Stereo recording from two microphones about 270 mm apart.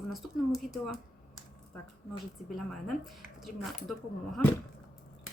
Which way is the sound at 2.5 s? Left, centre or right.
Centre.